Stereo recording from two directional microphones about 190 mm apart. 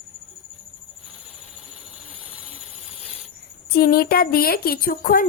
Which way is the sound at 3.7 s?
55° left (ahead or behind).